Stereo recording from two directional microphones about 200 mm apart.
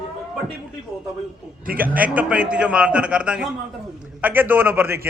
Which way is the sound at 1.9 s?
5° right (ahead or behind).